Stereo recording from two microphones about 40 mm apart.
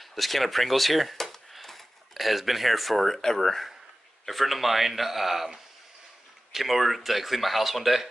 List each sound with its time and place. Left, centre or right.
0.0 s speech: centre